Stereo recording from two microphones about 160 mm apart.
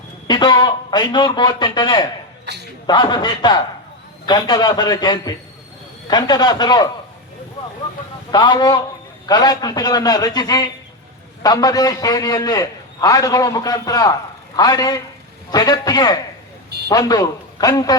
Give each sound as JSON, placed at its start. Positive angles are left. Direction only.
{"t": 0.3, "sound": "a man's voice", "side_deg": 25}
{"t": 8.3, "sound": "a man's voice", "side_deg": 25}